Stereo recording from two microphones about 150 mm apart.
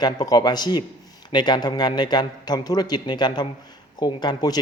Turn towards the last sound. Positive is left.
turn(degrees=25)  # may be behind; listen again after turning